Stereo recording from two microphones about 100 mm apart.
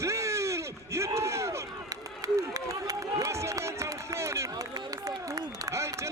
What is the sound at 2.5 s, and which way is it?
Run, 35° right (ahead or behind).